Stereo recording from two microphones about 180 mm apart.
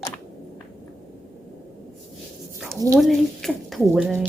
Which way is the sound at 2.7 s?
15° right (ahead or behind).